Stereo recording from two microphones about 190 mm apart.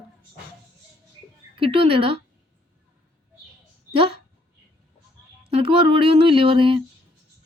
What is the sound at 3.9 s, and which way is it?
Speech, 30° right (ahead or behind).